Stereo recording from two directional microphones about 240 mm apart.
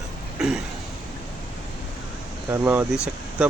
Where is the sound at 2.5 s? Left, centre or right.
Centre.